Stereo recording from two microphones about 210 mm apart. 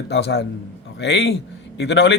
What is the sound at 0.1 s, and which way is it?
A man's voice, 55° left (ahead or behind).